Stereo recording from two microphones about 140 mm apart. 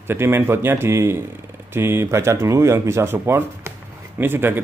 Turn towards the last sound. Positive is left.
turn(degrees=-15)  # may be behind; listen again after turning